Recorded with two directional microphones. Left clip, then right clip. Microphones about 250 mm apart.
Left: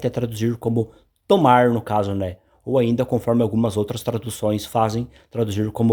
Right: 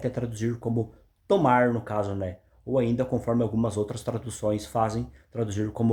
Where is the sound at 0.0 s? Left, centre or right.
Left.